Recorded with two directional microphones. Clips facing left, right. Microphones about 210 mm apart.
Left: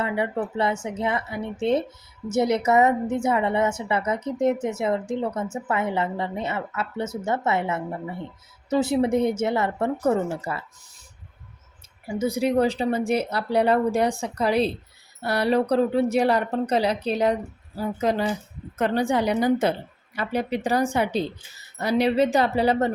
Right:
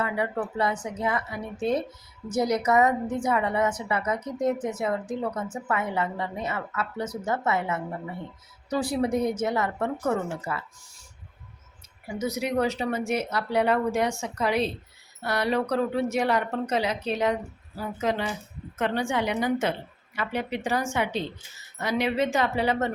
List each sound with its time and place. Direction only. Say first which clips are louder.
0.0 s a woman's voice: left 2 dB; 25° left (ahead or behind)
12.0 s speech: left 5 dB; 30° left (ahead or behind)